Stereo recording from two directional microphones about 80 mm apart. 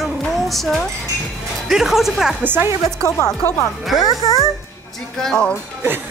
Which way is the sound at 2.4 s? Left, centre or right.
Right.